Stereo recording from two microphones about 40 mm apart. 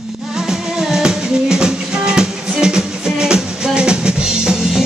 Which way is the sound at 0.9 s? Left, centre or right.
Centre.